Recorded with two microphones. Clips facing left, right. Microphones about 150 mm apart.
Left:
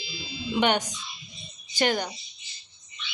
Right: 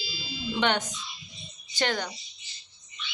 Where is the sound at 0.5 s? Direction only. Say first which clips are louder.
Left 3 dB; 15° left (ahead or behind).